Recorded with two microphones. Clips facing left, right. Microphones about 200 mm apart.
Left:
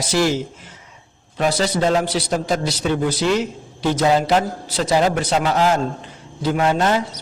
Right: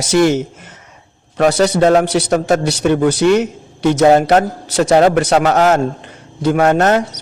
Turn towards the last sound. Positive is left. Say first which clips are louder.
# right 6 dB
turn(degrees=-65)  # may be behind; listen again after turning